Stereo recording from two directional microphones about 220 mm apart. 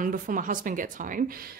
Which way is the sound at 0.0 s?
40° right (ahead or behind).